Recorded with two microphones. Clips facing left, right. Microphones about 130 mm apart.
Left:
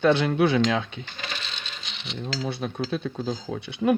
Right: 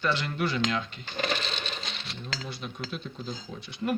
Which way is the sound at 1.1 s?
50° right (ahead or behind).